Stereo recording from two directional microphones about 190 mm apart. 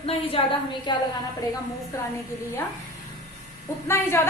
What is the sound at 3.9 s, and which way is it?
Speech, 15° left (ahead or behind).